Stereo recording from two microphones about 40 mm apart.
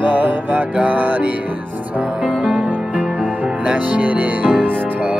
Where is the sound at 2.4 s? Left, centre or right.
Right.